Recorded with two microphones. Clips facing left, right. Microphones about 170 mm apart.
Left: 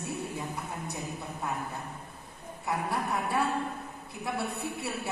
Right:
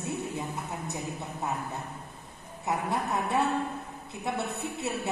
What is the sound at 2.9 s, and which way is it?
A man's voice, 20° right (ahead or behind).